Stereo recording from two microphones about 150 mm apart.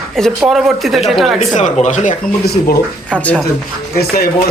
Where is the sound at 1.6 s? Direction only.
50° left (ahead or behind); by 2.8 s 90° left.